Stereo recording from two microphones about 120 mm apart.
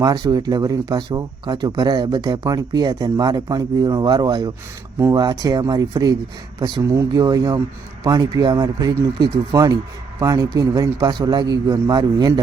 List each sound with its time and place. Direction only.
0.0 s speech: 30° right (ahead or behind)